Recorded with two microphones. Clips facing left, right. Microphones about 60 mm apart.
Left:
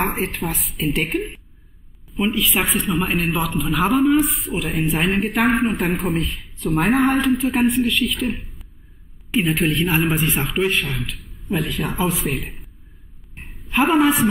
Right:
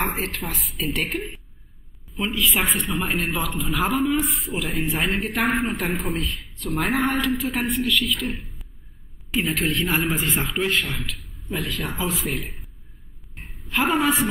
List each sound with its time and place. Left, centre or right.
0.0 s speech: left
0.6 s speech: centre
7.2 s speech: left
7.9 s a woman's voice: centre
9.3 s a woman's voice: centre
10.2 s speech: centre
10.6 s speech: left
11.1 s a sound: centre
11.5 s speech: left
12.3 s speech: centre
13.7 s a woman's voice: centre